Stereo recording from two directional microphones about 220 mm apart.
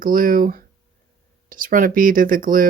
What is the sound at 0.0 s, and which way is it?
Speech, 40° right (ahead or behind).